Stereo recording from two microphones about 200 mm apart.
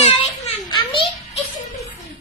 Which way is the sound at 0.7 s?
30° left (ahead or behind).